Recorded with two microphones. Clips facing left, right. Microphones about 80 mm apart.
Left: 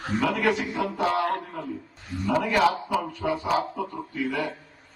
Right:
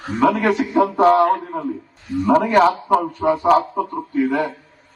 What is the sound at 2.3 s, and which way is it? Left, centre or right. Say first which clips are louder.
A man's voice: right 8 dB; right.